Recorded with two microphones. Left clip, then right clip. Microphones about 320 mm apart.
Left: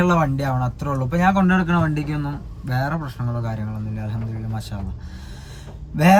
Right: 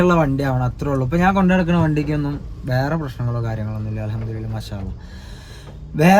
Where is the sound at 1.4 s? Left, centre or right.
Right.